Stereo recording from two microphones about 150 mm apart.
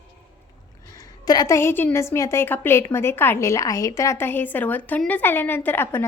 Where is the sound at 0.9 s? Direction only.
25° left (ahead or behind).